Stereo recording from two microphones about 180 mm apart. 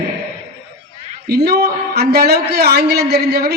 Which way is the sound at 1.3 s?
60° right (ahead or behind).